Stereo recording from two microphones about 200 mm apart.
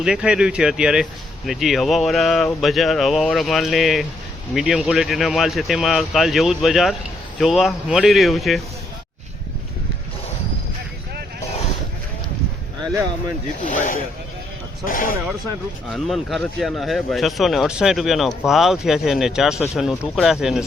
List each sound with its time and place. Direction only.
0.0 s speech: 5° right (ahead or behind)
13.6 s speech: 40° left (ahead or behind)
15.9 s speech: centre (ahead or behind)